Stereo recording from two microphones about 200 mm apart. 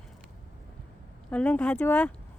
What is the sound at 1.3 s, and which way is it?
Speech, 10° left (ahead or behind).